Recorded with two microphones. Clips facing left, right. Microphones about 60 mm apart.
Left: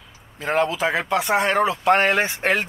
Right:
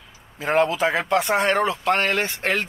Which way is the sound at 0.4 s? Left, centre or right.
Centre.